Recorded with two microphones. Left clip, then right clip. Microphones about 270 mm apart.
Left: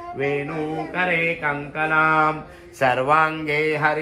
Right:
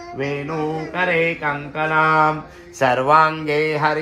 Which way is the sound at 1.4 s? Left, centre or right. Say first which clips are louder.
Right 1 dB; right.